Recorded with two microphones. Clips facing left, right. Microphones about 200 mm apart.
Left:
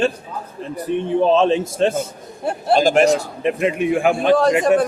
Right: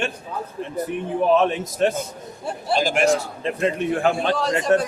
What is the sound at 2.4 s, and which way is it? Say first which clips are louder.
Speech: left 6 dB; 50° left (ahead or behind).